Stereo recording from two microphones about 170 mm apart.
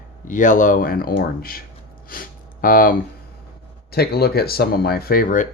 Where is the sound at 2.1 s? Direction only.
55° left (ahead or behind).